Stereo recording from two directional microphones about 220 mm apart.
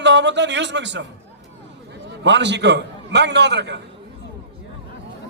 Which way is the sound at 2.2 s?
50° right (ahead or behind).